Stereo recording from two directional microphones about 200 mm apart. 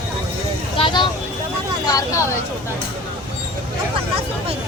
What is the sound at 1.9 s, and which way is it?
Speech, 15° left (ahead or behind).